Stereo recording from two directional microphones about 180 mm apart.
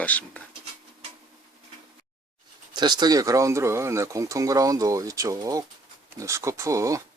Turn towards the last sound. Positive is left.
turn(degrees=-15)  # may be behind; listen again after turning